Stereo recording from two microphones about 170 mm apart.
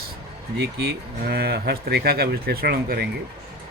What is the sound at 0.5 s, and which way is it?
Speech, 80° right.